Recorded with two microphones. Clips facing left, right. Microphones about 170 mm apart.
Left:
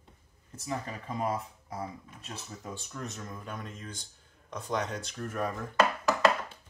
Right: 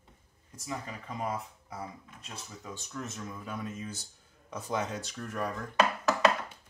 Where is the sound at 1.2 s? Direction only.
40° left (ahead or behind).